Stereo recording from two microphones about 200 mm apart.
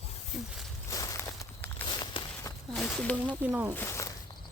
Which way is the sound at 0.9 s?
15° left (ahead or behind).